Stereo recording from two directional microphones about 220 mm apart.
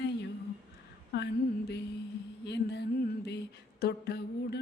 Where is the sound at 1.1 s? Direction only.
50° left (ahead or behind).